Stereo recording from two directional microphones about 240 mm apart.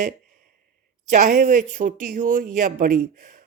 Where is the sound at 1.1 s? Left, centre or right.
Right.